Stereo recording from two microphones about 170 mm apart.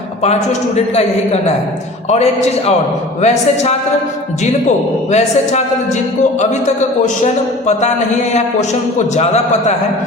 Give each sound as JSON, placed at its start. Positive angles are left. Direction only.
{"t": 2.0, "sound": "a man's voice", "side_deg": 40}
{"t": 5.1, "sound": "a man's voice", "side_deg": 40}
{"t": 9.1, "sound": "a man's voice", "side_deg": 40}